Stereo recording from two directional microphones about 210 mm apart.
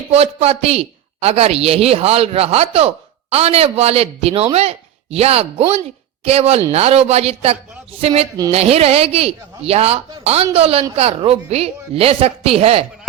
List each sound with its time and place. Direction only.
0.1 s a man's voice: 30° right (ahead or behind)